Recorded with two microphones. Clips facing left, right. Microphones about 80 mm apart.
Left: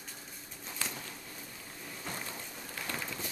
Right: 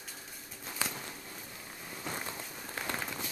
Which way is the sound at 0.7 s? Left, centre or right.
Centre.